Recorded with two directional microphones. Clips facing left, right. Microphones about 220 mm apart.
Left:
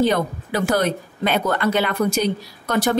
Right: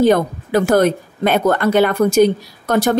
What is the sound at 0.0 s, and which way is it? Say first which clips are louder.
Speech: right 6 dB; 50° right (ahead or behind).